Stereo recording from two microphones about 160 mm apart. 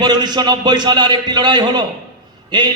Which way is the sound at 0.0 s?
25° right (ahead or behind).